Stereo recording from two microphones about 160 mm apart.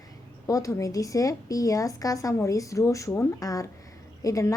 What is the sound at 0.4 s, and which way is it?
A woman's voice, 20° left (ahead or behind).